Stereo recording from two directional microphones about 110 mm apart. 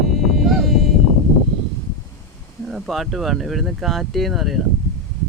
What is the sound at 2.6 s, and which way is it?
Speech, centre (ahead or behind).